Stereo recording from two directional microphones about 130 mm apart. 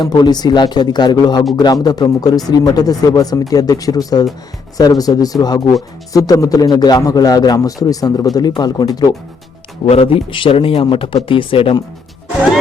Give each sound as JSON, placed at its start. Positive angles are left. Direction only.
{"t": 0.0, "sound": "a man's voice", "side_deg": 35}
{"t": 9.8, "sound": "speech", "side_deg": 50}